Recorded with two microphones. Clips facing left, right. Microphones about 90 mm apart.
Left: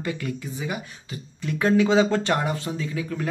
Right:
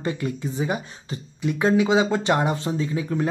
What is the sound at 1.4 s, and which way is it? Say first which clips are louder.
Speech: right 1 dB; 20° right (ahead or behind).